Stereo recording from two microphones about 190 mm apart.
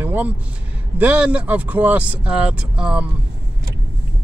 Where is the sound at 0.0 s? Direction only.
10° right (ahead or behind).